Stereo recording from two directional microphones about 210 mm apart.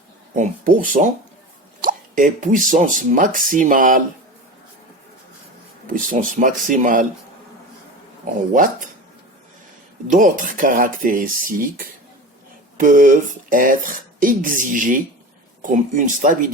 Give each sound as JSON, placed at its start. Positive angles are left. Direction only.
{"t": 0.3, "sound": "speech", "side_deg": -35}
{"t": 5.9, "sound": "speech", "side_deg": -40}
{"t": 8.5, "sound": "speech", "side_deg": -40}
{"t": 10.1, "sound": "speech", "side_deg": -40}
{"t": 12.7, "sound": "speech", "side_deg": -40}